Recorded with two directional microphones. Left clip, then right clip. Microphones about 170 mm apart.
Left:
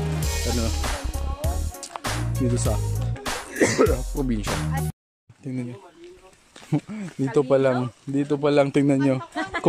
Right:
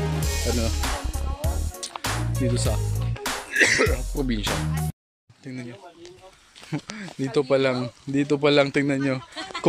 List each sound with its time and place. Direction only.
0.0 s music: centre (ahead or behind)
3.5 s speech: 15° left (ahead or behind)
3.9 s speech: centre (ahead or behind)
5.4 s speech: 15° left (ahead or behind)
6.7 s speech: 10° left (ahead or behind)
8.6 s speech: 10° left (ahead or behind)
9.3 s a sound: 50° left (ahead or behind)